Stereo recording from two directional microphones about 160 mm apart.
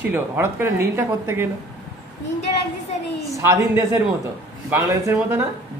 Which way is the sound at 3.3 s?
20° right (ahead or behind).